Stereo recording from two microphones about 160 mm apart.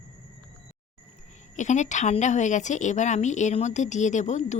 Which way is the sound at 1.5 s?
50° left (ahead or behind).